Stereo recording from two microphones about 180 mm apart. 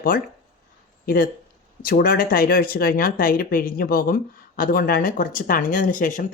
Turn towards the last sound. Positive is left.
turn(degrees=50)  # may be behind; listen again after turning